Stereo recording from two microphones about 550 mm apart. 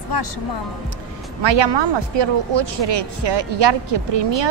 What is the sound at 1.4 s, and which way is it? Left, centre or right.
Speech, right.